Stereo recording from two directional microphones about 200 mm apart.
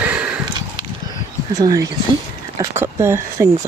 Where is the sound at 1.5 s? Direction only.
15° right (ahead or behind).